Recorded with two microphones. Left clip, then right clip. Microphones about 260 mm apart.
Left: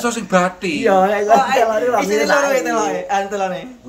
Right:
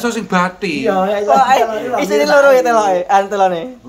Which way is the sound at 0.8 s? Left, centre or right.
Centre.